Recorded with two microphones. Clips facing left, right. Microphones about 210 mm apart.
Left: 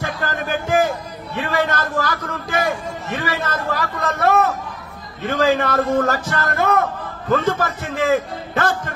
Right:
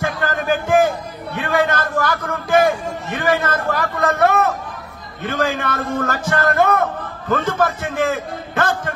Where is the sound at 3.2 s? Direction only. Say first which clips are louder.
Right 6 dB; 50° right (ahead or behind).